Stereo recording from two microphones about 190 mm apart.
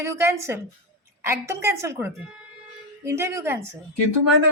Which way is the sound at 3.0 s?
15° right (ahead or behind).